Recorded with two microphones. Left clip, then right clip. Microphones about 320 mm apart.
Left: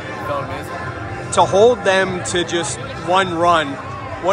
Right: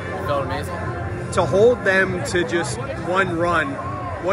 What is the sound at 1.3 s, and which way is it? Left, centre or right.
Speech, centre.